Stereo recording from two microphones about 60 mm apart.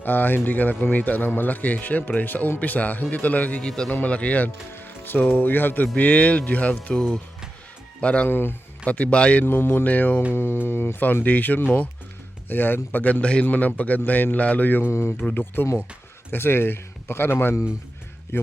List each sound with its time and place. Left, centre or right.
0.0 s speech: left
3.6 s speech: centre
3.8 s speech: left
4.7 s music: left
5.3 s speech: left
8.3 s speech: left
8.9 s speech: left
9.4 s speech: left
10.3 s speech: left